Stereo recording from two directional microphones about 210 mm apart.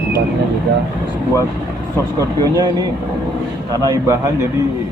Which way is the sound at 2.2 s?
20° right (ahead or behind).